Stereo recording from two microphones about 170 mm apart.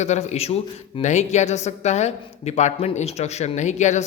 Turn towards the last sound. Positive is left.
turn(degrees=45)  # may be behind; listen again after turning